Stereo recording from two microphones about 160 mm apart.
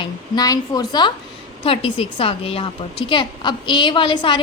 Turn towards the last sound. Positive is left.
turn(degrees=30)  # may be behind; listen again after turning